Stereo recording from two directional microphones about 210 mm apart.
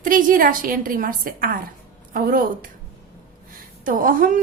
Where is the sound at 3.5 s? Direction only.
40° right (ahead or behind).